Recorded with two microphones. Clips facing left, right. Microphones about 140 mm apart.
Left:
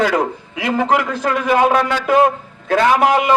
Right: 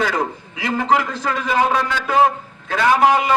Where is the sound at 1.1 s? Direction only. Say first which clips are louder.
Left 4 dB; 55° left (ahead or behind).